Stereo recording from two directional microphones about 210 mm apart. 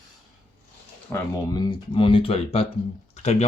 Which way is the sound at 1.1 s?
15° left (ahead or behind).